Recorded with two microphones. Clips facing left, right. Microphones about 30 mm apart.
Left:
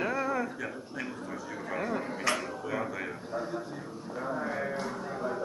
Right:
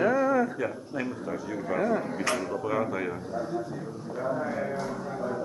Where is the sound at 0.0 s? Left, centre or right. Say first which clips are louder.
Right 7 dB; centre.